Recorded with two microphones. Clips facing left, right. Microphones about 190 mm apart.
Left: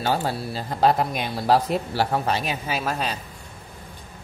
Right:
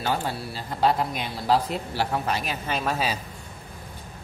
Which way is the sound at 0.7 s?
40° left (ahead or behind).